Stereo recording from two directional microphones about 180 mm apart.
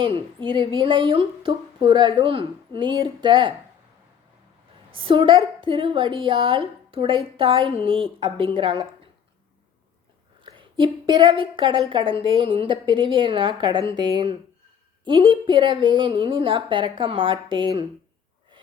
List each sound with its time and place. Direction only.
0.3 s a woman's voice: 30° right (ahead or behind)
4.9 s a woman's voice: 30° right (ahead or behind)
10.4 s a woman's voice: 25° right (ahead or behind)